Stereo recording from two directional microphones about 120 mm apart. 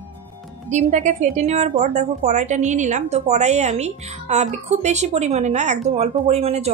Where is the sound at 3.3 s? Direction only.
70° right (ahead or behind).